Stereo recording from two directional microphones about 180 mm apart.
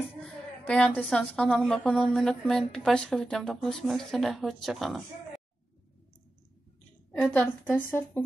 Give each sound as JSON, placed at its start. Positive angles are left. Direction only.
{"t": 0.2, "sound": "a woman's voice", "side_deg": 5}
{"t": 7.2, "sound": "a woman's voice", "side_deg": 10}